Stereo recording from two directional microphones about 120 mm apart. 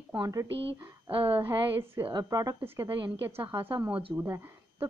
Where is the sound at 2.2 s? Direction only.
30° right (ahead or behind).